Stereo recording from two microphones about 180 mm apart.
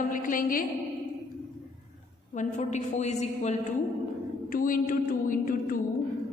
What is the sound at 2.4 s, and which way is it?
A woman's voice, 40° left (ahead or behind).